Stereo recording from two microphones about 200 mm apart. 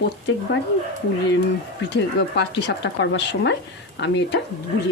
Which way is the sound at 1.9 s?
60° left (ahead or behind).